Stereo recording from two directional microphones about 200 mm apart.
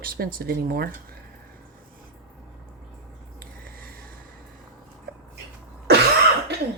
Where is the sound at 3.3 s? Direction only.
45° right (ahead or behind).